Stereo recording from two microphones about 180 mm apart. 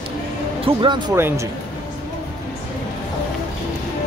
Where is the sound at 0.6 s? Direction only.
25° right (ahead or behind).